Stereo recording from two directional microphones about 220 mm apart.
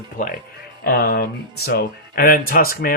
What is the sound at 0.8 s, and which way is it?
Speech, 45° left (ahead or behind).